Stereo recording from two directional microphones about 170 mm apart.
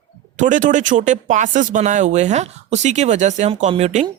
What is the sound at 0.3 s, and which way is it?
Speech, 50° right (ahead or behind).